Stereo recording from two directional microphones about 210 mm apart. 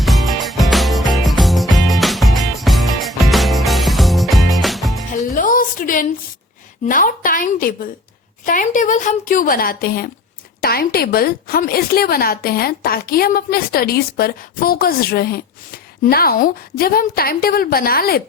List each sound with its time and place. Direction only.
0.0 s music: centre (ahead or behind)
5.2 s a sound: 40° left (ahead or behind)
6.8 s a woman's voice: 40° left (ahead or behind)